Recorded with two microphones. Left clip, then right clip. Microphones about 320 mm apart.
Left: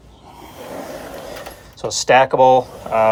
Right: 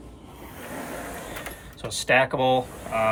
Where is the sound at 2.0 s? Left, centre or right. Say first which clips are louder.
Left 9 dB; centre.